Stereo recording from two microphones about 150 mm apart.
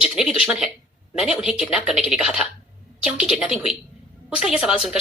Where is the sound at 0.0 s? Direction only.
5° right (ahead or behind).